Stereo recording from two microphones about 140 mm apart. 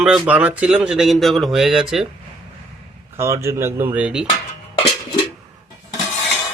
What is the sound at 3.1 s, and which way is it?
Speech, 20° right (ahead or behind).